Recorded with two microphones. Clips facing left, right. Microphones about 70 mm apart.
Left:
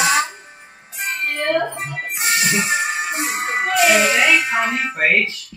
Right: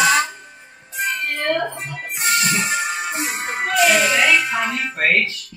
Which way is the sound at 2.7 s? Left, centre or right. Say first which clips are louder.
Left 2 dB; left.